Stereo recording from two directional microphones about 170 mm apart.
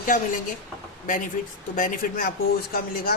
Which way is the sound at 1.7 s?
55° left (ahead or behind).